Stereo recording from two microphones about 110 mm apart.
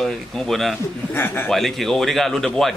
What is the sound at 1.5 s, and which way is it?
Speech, centre (ahead or behind).